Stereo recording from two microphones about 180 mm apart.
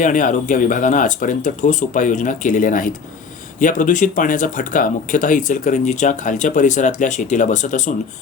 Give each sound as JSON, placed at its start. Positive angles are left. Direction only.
{"t": 0.0, "sound": "speech", "side_deg": 45}